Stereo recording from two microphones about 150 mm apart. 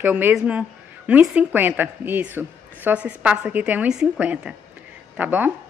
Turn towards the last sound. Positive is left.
turn(degrees=-10)  # may be behind; listen again after turning